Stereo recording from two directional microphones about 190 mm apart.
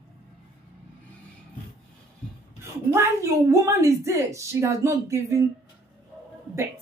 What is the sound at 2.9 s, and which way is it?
A woman's voice, 15° right (ahead or behind).